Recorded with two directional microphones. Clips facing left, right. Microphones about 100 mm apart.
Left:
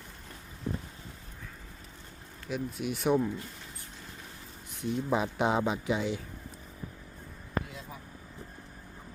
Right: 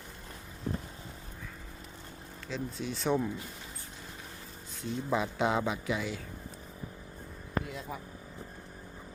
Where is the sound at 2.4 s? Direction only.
15° left (ahead or behind).